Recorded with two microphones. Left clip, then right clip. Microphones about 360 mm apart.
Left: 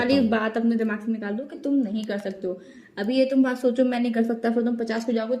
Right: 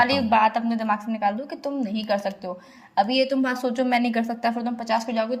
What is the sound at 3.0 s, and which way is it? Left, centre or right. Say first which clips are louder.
A woman's voice: left 1 dB; right.